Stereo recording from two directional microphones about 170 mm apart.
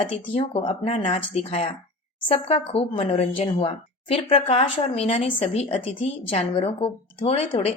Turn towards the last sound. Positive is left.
turn(degrees=35)  # may be behind; listen again after turning